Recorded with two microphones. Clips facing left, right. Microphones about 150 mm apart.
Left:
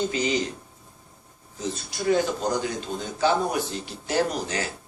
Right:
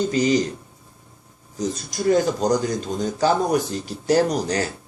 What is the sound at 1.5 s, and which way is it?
Speech, 40° right (ahead or behind).